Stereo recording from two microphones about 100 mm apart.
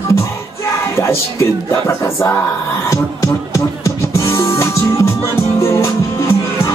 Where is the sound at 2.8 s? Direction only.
30° left (ahead or behind).